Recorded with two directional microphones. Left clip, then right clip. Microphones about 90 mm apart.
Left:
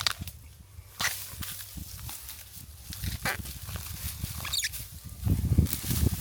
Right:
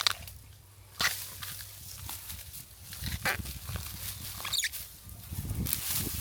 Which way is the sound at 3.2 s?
Centre (ahead or behind).